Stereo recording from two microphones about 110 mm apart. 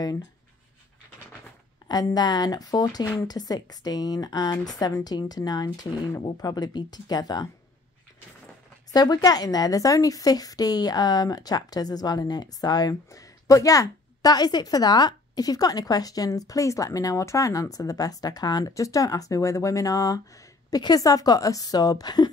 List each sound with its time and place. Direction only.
1.9 s a woman's voice: 35° left (ahead or behind)
8.9 s a woman's voice: 35° left (ahead or behind)